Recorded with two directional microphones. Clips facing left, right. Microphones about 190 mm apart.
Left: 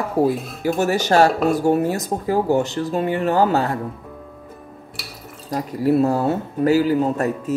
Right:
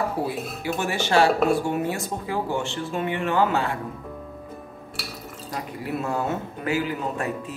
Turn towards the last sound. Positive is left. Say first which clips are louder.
# left 7 dB
turn(degrees=40)  # may be behind; listen again after turning